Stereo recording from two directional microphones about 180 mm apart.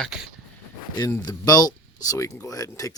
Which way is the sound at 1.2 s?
20° left (ahead or behind).